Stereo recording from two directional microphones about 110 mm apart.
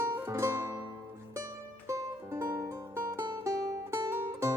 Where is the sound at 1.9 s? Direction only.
30° right (ahead or behind).